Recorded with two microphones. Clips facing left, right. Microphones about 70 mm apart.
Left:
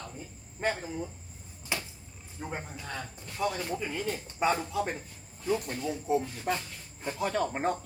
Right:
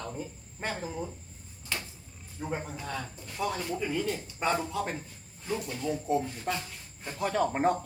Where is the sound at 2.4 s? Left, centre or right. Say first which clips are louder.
Right 4 dB; centre.